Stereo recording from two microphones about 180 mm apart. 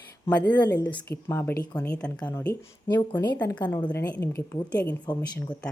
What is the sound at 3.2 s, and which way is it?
Speech, 25° left (ahead or behind).